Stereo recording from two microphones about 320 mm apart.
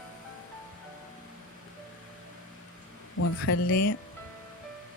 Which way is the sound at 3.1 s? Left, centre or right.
Left.